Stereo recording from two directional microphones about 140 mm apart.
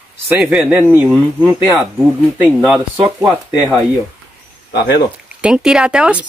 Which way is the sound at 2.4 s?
Centre (ahead or behind).